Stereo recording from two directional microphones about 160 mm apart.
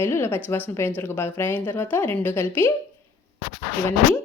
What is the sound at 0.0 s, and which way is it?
A woman's voice, 15° left (ahead or behind).